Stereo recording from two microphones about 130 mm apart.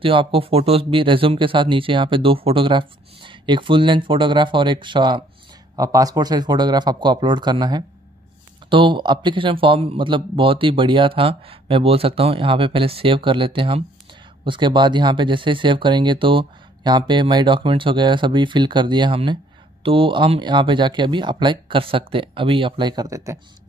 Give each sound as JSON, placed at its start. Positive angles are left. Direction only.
{"t": 0.0, "sound": "speech", "side_deg": -45}